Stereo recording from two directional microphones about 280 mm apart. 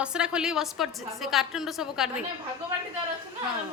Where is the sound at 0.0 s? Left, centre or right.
Centre.